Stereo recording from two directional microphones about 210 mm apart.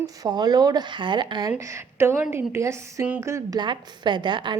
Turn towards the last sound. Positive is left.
turn(degrees=-20)  # may be behind; listen again after turning